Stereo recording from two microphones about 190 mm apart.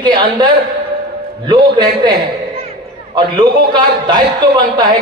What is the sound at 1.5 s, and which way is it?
Speech, 25° right (ahead or behind).